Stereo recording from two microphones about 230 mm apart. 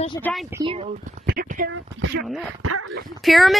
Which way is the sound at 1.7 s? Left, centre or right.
Right.